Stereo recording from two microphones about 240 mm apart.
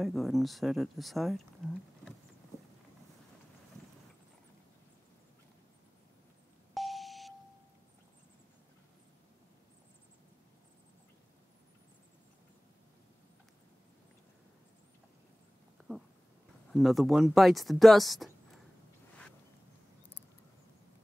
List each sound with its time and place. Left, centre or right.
0.0 s speech: centre
6.7 s beep: centre
16.7 s speech: centre